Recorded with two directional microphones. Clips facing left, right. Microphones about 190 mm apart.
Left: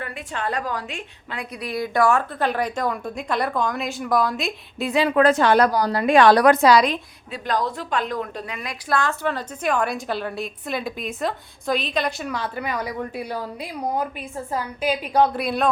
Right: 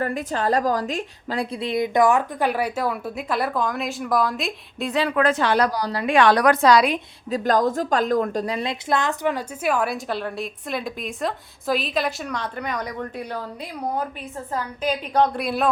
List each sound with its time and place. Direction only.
0.0 s a woman's voice: 40° right (ahead or behind); by 5.0 s 5° left (ahead or behind)
5.0 s a woman's voice: 30° left (ahead or behind)
6.6 s a woman's voice: 5° left (ahead or behind)
7.3 s a woman's voice: 45° right (ahead or behind); by 15.7 s centre (ahead or behind)